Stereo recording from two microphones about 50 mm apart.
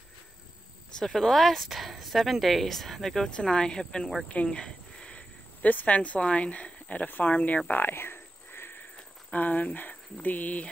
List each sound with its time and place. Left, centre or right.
0.9 s speech: centre
3.3 s speech: centre
7.8 s a sound: left
9.3 s speech: left